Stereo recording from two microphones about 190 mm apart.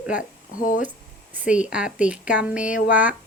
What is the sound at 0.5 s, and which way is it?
Speech, 45° left (ahead or behind).